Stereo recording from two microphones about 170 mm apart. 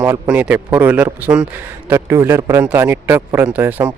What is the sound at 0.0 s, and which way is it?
A man's voice, 10° right (ahead or behind).